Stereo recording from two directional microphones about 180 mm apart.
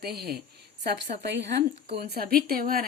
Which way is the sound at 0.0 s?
60° right (ahead or behind).